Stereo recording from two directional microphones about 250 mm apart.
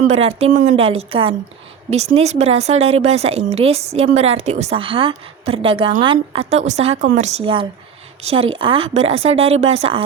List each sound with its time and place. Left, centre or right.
0.1 s speech: right